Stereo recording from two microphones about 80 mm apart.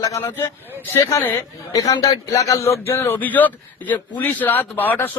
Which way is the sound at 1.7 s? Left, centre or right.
Left.